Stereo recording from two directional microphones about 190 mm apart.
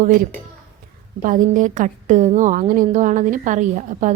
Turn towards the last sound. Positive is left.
turn(degrees=-40)  # may be behind; listen again after turning